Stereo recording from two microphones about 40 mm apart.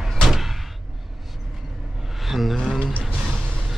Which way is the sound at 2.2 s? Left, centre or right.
Centre.